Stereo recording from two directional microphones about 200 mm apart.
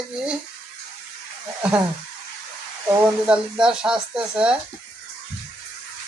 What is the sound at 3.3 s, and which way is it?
Speech, 5° right (ahead or behind).